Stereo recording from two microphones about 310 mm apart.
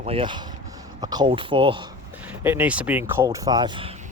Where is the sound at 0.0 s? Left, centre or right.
Centre.